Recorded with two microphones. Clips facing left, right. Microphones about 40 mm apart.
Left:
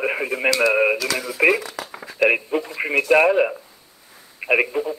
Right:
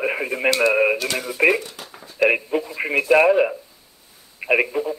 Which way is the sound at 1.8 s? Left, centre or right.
Left.